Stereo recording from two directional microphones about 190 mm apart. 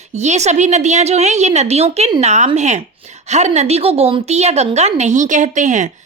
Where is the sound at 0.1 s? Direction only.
35° right (ahead or behind).